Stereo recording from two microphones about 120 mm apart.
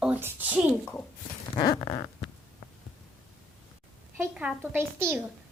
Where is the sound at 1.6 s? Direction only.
35° left (ahead or behind).